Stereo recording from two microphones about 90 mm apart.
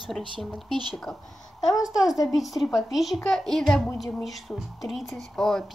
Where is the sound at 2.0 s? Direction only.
40° left (ahead or behind).